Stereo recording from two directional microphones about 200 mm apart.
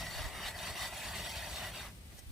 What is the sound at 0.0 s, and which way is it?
Wood, centre (ahead or behind).